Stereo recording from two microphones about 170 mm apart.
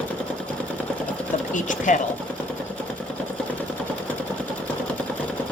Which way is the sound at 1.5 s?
50° left (ahead or behind).